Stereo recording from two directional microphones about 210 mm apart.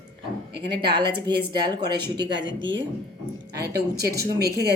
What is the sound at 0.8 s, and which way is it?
Speech, 20° right (ahead or behind).